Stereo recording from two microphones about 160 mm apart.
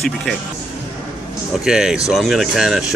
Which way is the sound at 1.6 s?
5° right (ahead or behind).